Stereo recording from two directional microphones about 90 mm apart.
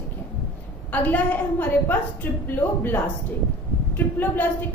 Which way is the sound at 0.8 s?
20° left (ahead or behind).